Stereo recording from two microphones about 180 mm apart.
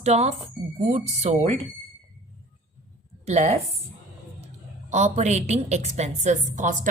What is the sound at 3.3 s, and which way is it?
Speech, 40° right (ahead or behind).